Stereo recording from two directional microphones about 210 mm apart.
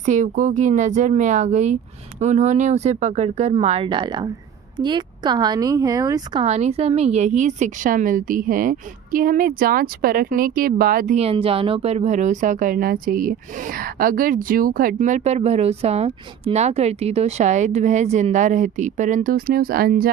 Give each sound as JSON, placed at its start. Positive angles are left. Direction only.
{"t": 0.0, "sound": "a woman's voice", "side_deg": -35}
{"t": 6.4, "sound": "speech", "side_deg": -30}
{"t": 11.2, "sound": "speech", "side_deg": -25}